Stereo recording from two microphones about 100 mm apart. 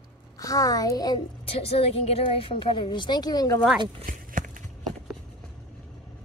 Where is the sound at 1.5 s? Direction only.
80° left; by 3.4 s 40° left (ahead or behind).